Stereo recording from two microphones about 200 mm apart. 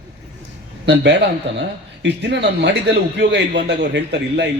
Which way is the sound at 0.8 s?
60° right (ahead or behind).